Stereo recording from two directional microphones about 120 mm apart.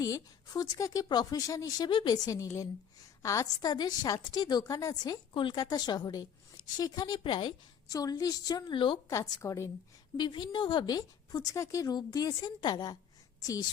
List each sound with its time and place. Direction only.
0.0 s a woman's voice: 30° left (ahead or behind)
9.0 s a woman's voice: 25° left (ahead or behind)
10.2 s a woman's voice: 40° left (ahead or behind)